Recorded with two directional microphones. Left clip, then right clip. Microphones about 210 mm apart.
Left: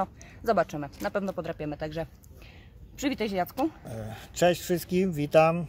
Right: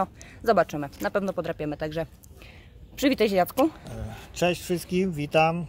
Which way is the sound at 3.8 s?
20° left (ahead or behind).